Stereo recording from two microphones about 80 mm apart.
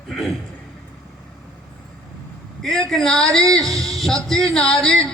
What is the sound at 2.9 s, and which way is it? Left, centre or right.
Speech, centre.